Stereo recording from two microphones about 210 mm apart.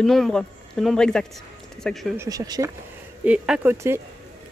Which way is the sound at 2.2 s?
15° right (ahead or behind).